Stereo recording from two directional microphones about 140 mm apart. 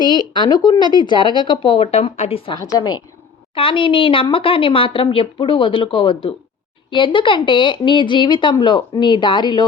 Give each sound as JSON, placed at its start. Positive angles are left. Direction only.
{"t": 0.0, "sound": "speech", "side_deg": 30}
{"t": 2.6, "sound": "a woman's voice", "side_deg": 30}
{"t": 3.5, "sound": "speech", "side_deg": 40}